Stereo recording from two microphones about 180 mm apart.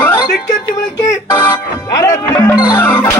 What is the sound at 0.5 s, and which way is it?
Speech, 20° left (ahead or behind).